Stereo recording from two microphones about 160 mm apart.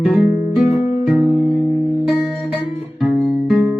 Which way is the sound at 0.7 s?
45° left (ahead or behind).